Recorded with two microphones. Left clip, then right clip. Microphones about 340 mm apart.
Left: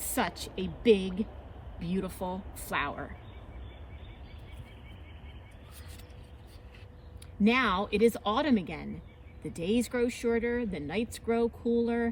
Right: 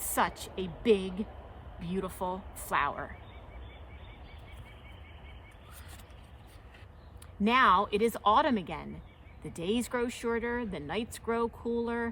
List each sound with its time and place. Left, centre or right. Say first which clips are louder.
0.1 s a woman's voice: right 2 dB; right
2.7 s a woman's voice: right 2 dB; centre
7.4 s a woman's voice: right 3 dB; centre